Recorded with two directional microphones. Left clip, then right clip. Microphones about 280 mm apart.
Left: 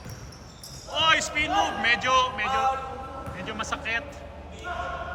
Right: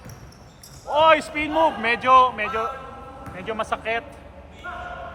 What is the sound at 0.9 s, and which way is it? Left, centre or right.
A man's voice, centre.